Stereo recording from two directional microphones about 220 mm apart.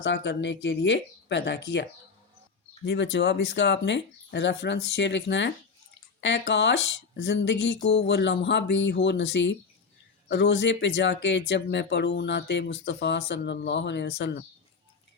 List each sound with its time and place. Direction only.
0.0 s speech: 55° left (ahead or behind)